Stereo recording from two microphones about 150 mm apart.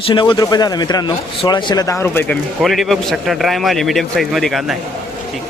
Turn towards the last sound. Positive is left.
turn(degrees=0)  # may be behind; listen again after turning